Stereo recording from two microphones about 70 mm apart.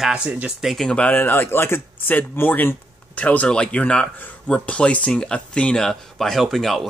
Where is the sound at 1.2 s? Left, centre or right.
Left.